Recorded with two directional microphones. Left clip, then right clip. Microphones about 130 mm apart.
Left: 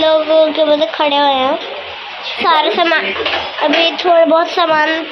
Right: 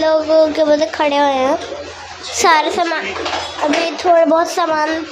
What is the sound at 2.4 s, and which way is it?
Speech, 45° right (ahead or behind).